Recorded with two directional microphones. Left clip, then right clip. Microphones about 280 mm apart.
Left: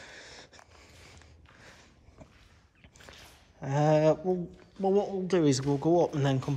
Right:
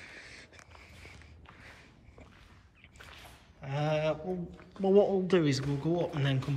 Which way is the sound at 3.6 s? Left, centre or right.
Left.